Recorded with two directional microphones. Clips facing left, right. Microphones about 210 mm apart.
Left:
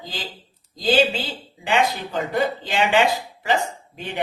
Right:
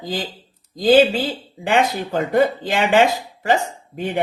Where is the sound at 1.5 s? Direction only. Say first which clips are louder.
Right 3 dB; 50° right (ahead or behind).